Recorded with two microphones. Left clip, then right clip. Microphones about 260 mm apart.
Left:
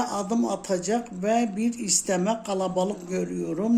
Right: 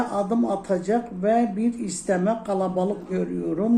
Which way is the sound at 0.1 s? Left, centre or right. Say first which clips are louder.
Right 3 dB; left.